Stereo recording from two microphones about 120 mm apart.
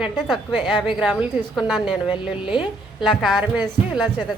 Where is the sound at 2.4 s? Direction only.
40° left (ahead or behind).